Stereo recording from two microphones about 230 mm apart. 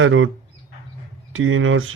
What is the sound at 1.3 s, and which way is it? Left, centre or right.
Speech, right.